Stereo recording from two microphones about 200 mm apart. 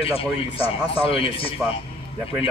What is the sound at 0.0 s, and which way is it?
Speech, 30° left (ahead or behind).